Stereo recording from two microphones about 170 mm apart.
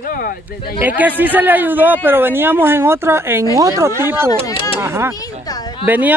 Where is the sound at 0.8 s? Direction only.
10° right (ahead or behind).